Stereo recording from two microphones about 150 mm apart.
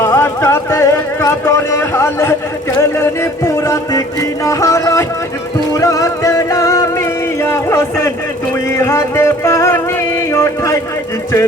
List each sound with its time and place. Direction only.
0.0 s music: 20° left (ahead or behind)